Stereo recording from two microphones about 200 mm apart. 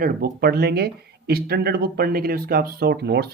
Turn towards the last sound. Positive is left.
turn(degrees=-55)  # may be behind; listen again after turning